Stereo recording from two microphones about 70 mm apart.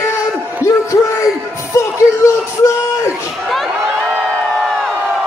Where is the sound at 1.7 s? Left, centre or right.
Left.